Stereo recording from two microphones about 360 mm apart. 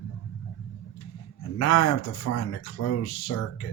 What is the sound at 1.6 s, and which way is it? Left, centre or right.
Speech, left.